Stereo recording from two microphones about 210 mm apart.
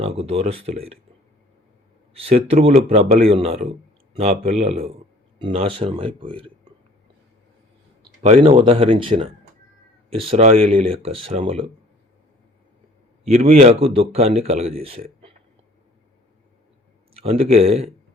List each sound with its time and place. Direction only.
0.0 s speech: 30° right (ahead or behind)
2.1 s speech: 30° right (ahead or behind)
8.2 s speech: 30° right (ahead or behind)
13.2 s speech: 30° right (ahead or behind)
17.2 s speech: 30° right (ahead or behind)